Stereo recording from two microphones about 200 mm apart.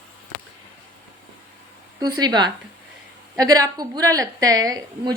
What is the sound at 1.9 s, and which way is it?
A woman's voice, 20° right (ahead or behind).